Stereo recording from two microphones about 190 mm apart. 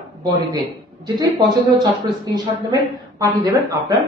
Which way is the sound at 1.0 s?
20° right (ahead or behind).